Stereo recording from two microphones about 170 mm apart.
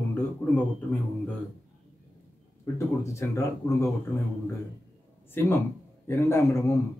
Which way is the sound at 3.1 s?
20° left (ahead or behind).